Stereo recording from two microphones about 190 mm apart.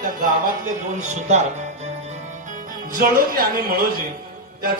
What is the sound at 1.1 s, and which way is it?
Speech, 35° right (ahead or behind).